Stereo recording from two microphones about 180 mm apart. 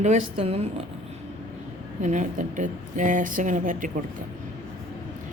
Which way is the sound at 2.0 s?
45° right (ahead or behind).